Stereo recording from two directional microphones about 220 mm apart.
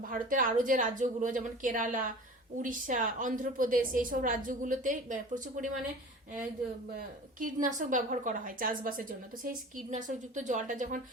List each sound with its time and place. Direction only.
0.0 s a woman's voice: 40° right (ahead or behind)
6.9 s a woman's voice: 35° right (ahead or behind)